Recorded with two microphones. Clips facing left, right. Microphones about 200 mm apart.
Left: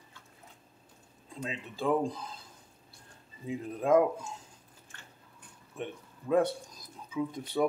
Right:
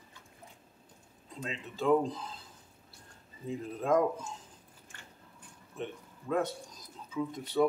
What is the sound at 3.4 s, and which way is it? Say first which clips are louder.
Speech: left 2 dB; 10° left (ahead or behind).